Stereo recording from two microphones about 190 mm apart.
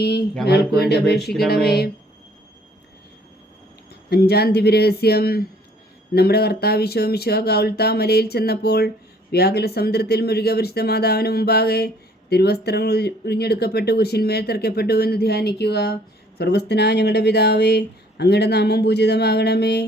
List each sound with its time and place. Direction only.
0.0 s speech: 55° left (ahead or behind)
4.1 s speech: 55° left (ahead or behind)